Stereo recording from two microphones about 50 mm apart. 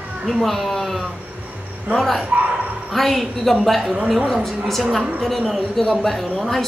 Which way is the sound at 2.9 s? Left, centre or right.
Centre.